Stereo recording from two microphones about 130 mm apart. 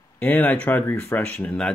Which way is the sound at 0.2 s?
10° left (ahead or behind).